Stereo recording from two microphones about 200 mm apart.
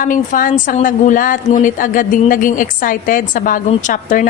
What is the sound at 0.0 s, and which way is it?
A woman's voice, 40° left (ahead or behind).